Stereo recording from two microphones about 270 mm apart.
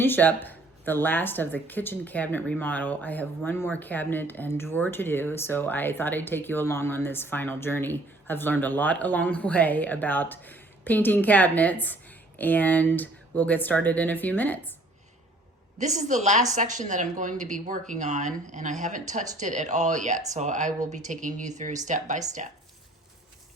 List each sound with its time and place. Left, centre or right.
0.0 s speech: centre
15.8 s speech: right